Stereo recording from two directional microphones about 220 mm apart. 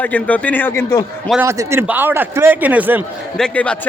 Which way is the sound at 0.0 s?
5° left (ahead or behind).